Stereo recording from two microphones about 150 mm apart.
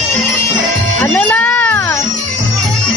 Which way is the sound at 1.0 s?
10° left (ahead or behind).